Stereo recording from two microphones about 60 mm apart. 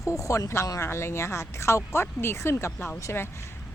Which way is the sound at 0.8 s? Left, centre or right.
Left.